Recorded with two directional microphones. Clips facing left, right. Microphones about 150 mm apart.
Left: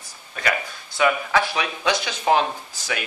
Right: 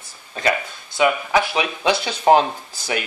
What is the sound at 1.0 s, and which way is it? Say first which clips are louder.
Speech: right 2 dB; 20° right (ahead or behind).